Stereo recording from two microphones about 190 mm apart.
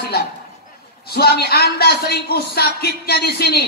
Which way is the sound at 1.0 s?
55° left (ahead or behind).